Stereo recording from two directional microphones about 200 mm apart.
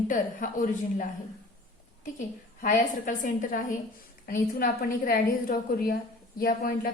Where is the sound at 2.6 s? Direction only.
40° left (ahead or behind).